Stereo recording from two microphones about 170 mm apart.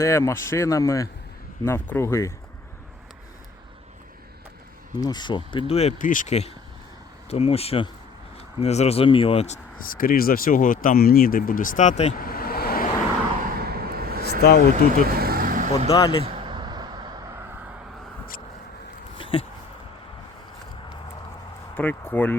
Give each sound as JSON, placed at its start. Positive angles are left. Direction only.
{"t": 0.0, "sound": "speech", "side_deg": 15}
{"t": 4.9, "sound": "speech", "side_deg": 25}
{"t": 6.0, "sound": "speech", "side_deg": 50}
{"t": 9.8, "sound": "speech", "side_deg": 55}
{"t": 12.2, "sound": "vehicle", "side_deg": 60}
{"t": 13.4, "sound": "vehicle", "side_deg": -60}
{"t": 14.4, "sound": "speech", "side_deg": 60}
{"t": 15.1, "sound": "vehicle", "side_deg": -60}
{"t": 15.9, "sound": "speech", "side_deg": 20}
{"t": 16.2, "sound": "vehicle", "side_deg": -30}
{"t": 19.1, "sound": "a sound", "side_deg": 30}
{"t": 21.8, "sound": "speech", "side_deg": 10}